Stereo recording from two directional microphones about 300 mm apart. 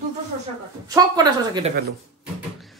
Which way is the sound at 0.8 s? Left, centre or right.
Centre.